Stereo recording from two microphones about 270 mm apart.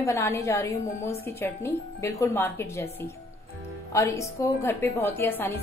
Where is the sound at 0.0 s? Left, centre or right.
Centre.